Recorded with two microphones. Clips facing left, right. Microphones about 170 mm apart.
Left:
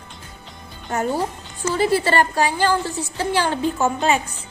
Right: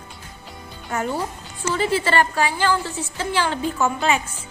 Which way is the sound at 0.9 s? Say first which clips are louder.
Left 3 dB; 40° left (ahead or behind).